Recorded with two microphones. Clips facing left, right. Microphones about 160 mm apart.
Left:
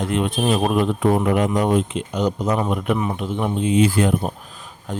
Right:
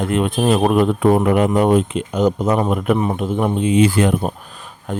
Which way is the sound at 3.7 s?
75° right (ahead or behind).